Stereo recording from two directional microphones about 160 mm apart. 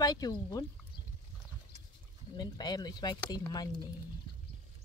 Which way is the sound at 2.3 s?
25° left (ahead or behind).